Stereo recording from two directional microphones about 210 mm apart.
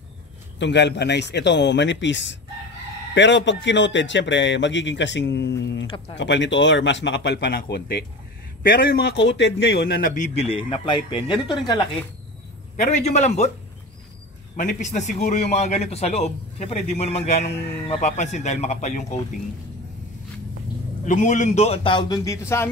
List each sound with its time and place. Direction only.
0.6 s a man's voice: 55° left (ahead or behind); by 10.4 s 35° left (ahead or behind)
10.5 s speech: 25° left (ahead or behind)
12.7 s a man's voice: 35° left (ahead or behind)
14.6 s a man's voice: 35° left (ahead or behind)
21.0 s a man's voice: 35° left (ahead or behind); by 22.4 s 15° left (ahead or behind)